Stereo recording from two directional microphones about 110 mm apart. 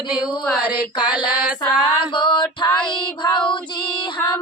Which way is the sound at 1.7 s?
45° left (ahead or behind).